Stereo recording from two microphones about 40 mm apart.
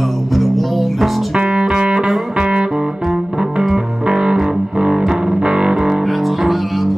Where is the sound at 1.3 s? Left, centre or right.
Right.